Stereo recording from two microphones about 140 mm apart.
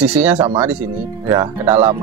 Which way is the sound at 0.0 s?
10° right (ahead or behind).